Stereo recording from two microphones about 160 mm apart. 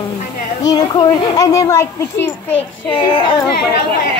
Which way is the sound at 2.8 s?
30° left (ahead or behind).